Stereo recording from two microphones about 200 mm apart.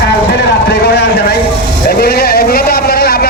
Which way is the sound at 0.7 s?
55° left (ahead or behind).